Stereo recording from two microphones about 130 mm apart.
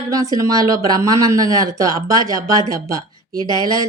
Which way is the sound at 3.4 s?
30° left (ahead or behind).